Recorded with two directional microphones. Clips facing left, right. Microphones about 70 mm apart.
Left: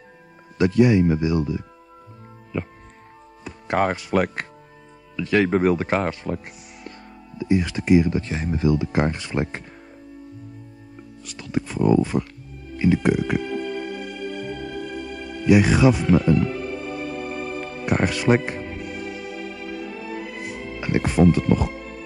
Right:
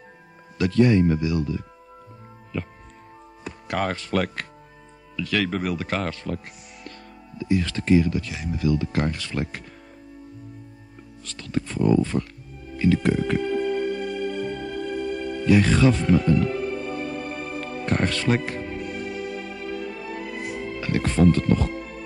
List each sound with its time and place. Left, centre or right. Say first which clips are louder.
0.6 s speech: left 2 dB; centre
3.6 s speech: left 5 dB; left
11.2 s speech: left 1 dB; centre
12.7 s music: left 2 dB; centre
13.4 s organ: right 4 dB; centre
15.4 s music: left 2 dB; centre
17.8 s speech: left 3 dB; centre
18.9 s music: right 1 dB; centre
20.8 s speech: left 2 dB; centre